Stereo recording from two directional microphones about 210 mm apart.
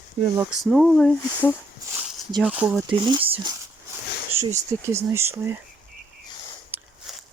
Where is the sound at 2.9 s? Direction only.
25° right (ahead or behind).